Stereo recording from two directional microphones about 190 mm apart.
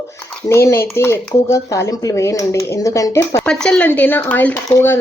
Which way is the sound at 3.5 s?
5° left (ahead or behind).